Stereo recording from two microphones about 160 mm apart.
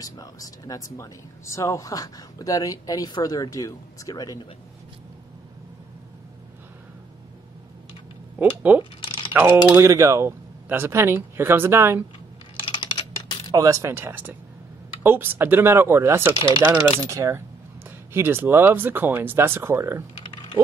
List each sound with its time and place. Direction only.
0.0 s speech: 25° left (ahead or behind)
8.7 s speech: 10° right (ahead or behind)
12.7 s typing: 30° left (ahead or behind)
13.5 s speech: 20° right (ahead or behind)